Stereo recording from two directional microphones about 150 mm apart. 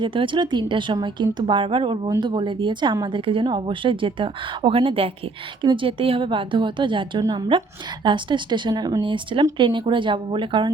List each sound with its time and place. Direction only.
0.0 s speech: 35° right (ahead or behind)